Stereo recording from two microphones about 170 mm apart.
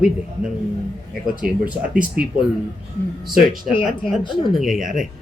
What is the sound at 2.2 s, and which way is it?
A man's voice, 5° right (ahead or behind).